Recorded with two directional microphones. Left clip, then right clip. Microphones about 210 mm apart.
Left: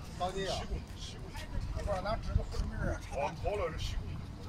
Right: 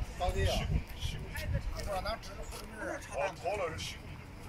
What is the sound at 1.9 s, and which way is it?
Speech, 40° left (ahead or behind).